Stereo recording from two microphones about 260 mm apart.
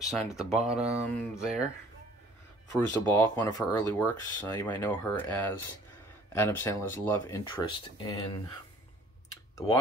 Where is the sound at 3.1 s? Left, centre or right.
Centre.